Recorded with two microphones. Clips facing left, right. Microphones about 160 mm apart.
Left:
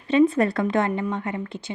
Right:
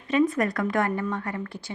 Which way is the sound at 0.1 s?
30° left (ahead or behind).